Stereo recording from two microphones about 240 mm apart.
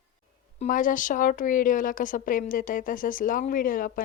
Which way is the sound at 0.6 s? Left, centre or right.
Left.